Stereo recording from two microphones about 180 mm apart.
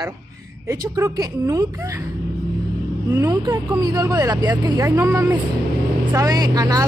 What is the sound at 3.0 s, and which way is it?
A woman's voice, 20° right (ahead or behind).